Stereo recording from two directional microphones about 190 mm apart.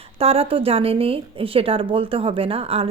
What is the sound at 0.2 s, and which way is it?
Speech, 30° right (ahead or behind).